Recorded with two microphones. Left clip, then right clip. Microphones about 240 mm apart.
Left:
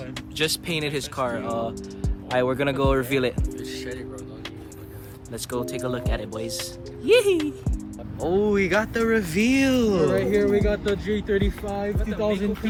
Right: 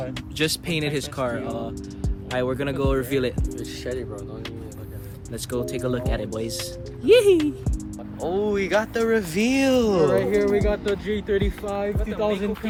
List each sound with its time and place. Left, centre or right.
0.3 s speech: centre
2.3 s speech: left
3.6 s speech: centre
5.3 s speech: centre
8.2 s speech: centre
10.5 s speech: right